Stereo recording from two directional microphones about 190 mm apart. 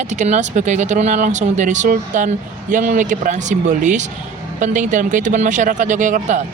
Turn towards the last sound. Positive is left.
turn(degrees=-40)  # may be behind; listen again after turning